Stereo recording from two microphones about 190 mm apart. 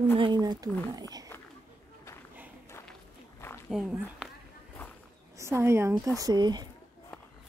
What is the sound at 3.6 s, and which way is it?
Speech, 5° right (ahead or behind).